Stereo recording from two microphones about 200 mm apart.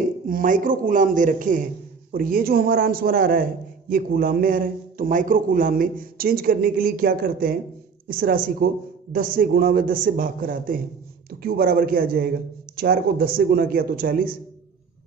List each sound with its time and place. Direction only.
0.3 s a man's voice: 45° right (ahead or behind)